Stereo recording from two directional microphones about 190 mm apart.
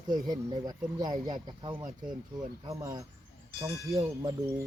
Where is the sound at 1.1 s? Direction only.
30° right (ahead or behind).